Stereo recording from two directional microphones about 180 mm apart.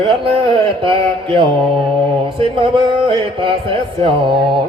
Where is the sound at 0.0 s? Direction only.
30° right (ahead or behind).